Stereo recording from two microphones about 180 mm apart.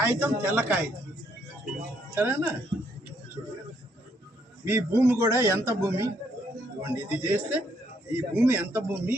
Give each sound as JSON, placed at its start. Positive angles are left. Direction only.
{"t": 0.0, "sound": "a man's voice", "side_deg": -10}
{"t": 2.1, "sound": "a man's voice", "side_deg": -10}
{"t": 4.6, "sound": "a man's voice", "side_deg": -10}